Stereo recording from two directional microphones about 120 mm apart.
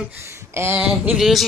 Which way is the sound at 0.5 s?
20° right (ahead or behind).